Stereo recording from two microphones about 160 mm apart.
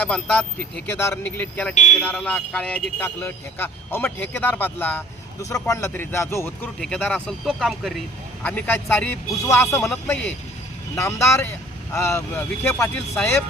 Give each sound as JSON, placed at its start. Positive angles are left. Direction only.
{"t": 0.0, "sound": "speech", "side_deg": 5}
{"t": 6.7, "sound": "speech", "side_deg": 5}
{"t": 8.4, "sound": "speech", "side_deg": 10}
{"t": 9.9, "sound": "speech", "side_deg": 5}
{"t": 10.9, "sound": "speech", "side_deg": 15}